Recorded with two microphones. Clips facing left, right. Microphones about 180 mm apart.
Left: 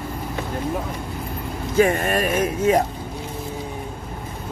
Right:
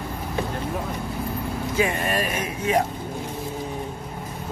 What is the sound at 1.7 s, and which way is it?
Speech, 45° left (ahead or behind).